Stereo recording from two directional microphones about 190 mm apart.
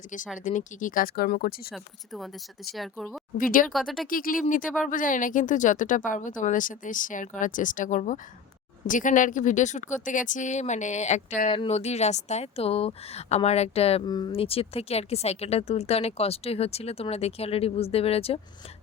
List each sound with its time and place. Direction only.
0.4 s speech: 40° left (ahead or behind)
1.7 s speech: centre (ahead or behind)
3.3 s speech: 45° left (ahead or behind)
3.7 s speech: centre (ahead or behind)
4.0 s a woman's voice: 45° left (ahead or behind); by 18.3 s 30° left (ahead or behind)